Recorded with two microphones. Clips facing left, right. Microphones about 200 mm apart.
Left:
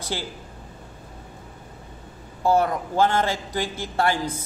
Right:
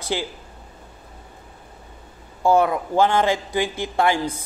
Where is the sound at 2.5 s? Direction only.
15° right (ahead or behind).